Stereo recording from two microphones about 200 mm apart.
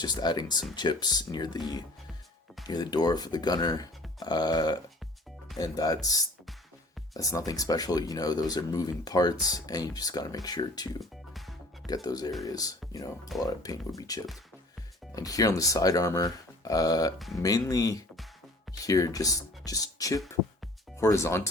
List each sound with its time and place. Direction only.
0.0 s speech: 20° left (ahead or behind)
11.0 s music: centre (ahead or behind)
12.0 s speech: 20° left (ahead or behind)
17.2 s speech: centre (ahead or behind)
17.4 s speech: 20° left (ahead or behind)